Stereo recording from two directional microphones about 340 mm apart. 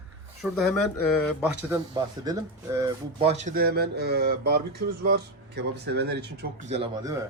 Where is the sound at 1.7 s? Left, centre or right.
Centre.